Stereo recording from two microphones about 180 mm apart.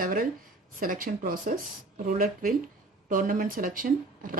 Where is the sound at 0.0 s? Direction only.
50° right (ahead or behind).